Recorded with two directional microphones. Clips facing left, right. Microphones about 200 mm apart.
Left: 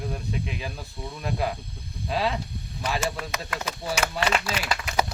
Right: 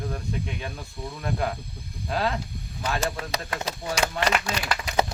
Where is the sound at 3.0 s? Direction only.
35° right (ahead or behind).